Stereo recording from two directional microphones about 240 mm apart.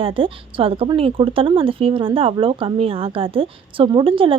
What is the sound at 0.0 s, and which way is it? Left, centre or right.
A woman's voice, right.